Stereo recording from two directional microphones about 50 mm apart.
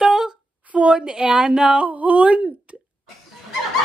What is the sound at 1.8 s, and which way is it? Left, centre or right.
Speech, right.